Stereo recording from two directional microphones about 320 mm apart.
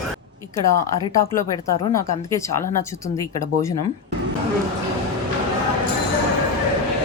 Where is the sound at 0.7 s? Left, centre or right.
Right.